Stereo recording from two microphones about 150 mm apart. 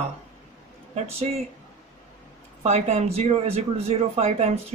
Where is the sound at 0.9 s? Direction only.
45° right (ahead or behind).